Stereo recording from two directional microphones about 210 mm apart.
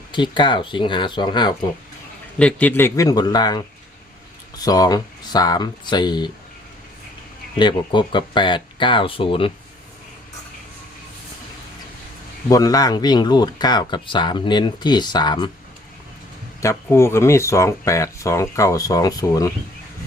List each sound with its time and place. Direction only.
0.1 s speech: 20° left (ahead or behind)
2.4 s speech: 5° left (ahead or behind)
4.6 s speech: 15° left (ahead or behind)
7.6 s speech: 20° left (ahead or behind)
12.5 s speech: 15° left (ahead or behind)
16.6 s speech: 15° left (ahead or behind)